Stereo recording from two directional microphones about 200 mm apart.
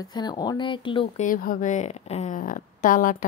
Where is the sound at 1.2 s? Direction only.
45° left (ahead or behind).